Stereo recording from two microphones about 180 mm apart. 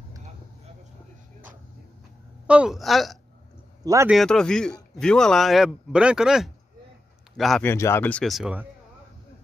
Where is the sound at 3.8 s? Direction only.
15° right (ahead or behind).